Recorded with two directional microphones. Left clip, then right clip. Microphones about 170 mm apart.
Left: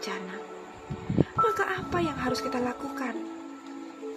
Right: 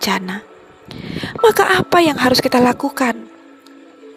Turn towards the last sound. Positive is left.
turn(degrees=-75)  # may be behind; listen again after turning